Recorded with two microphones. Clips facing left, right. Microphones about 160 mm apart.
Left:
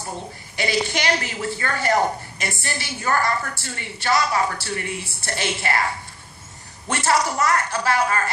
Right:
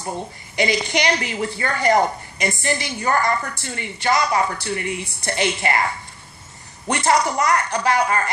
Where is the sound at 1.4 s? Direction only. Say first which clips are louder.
Right 2 dB; 15° right (ahead or behind).